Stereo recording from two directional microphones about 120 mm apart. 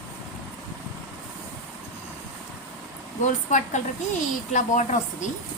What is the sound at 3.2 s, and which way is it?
A woman's voice, 90° left.